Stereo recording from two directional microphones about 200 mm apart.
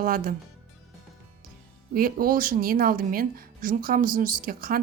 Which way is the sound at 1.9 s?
45° right (ahead or behind).